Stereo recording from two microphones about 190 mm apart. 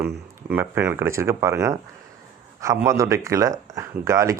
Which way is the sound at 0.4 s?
10° right (ahead or behind).